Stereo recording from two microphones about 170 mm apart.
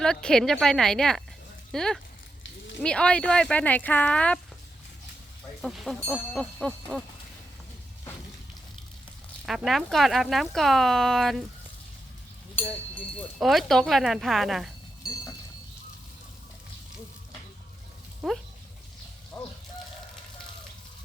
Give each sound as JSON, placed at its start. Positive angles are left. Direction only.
{"t": 0.0, "sound": "speech", "side_deg": 5}
{"t": 5.6, "sound": "speech", "side_deg": 0}
{"t": 9.5, "sound": "speech", "side_deg": 0}
{"t": 13.1, "sound": "speech", "side_deg": 0}
{"t": 18.2, "sound": "speech", "side_deg": 0}
{"t": 19.3, "sound": "a sound", "side_deg": 20}